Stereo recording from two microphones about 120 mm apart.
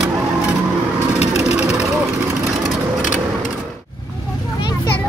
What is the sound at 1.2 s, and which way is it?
Vehicle, 65° left (ahead or behind).